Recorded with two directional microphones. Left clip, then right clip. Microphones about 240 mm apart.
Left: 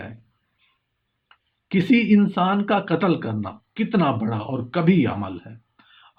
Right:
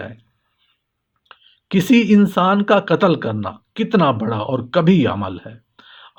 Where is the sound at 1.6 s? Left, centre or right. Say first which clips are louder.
Right 4 dB; right.